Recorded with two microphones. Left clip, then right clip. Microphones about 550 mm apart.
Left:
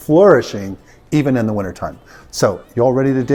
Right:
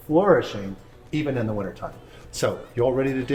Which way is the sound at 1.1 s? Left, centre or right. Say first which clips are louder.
Left 9 dB; left.